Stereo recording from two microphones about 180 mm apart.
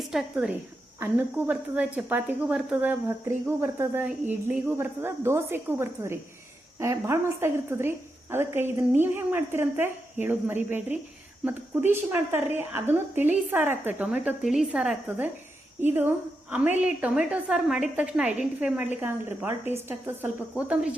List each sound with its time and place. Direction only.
0.0 s a woman's voice: centre (ahead or behind)